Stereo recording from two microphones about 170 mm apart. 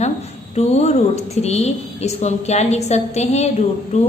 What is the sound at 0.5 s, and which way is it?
A woman's voice, 40° left (ahead or behind).